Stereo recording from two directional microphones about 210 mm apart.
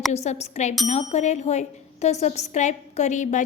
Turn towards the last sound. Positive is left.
turn(degrees=35)  # may be behind; listen again after turning